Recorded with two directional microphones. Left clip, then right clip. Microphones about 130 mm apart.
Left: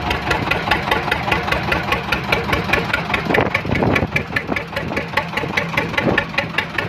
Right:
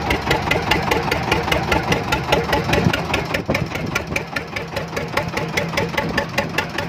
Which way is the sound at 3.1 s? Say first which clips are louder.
Left 4 dB; 50° right (ahead or behind).